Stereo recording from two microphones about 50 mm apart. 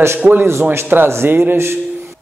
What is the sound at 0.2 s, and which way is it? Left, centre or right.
Speech, right.